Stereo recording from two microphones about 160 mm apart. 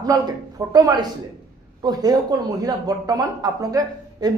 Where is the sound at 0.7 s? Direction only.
25° right (ahead or behind).